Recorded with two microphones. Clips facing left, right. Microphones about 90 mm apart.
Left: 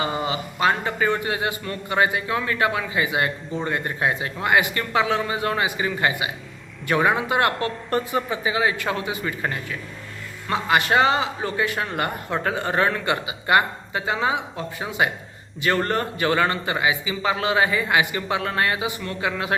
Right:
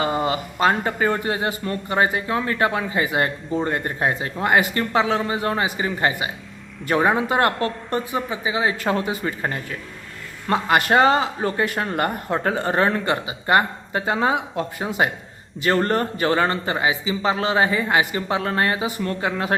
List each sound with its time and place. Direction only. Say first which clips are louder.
0.0 s speech: right 3 dB; 40° right (ahead or behind)
7.9 s speech: left 1 dB; 15° right (ahead or behind)
8.8 s a man's voice: right 3 dB; 40° right (ahead or behind)